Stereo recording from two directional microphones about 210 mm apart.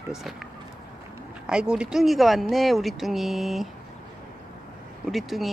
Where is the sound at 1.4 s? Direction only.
5° right (ahead or behind).